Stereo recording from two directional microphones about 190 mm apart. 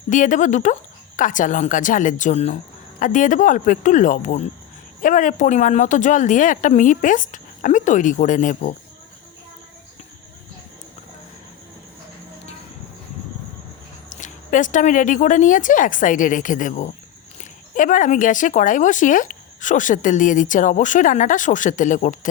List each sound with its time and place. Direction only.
0.1 s speech: 40° left (ahead or behind)
14.1 s speech: 40° left (ahead or behind)